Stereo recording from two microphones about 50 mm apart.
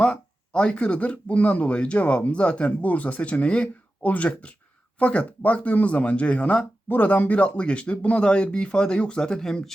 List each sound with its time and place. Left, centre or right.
0.0 s speech: centre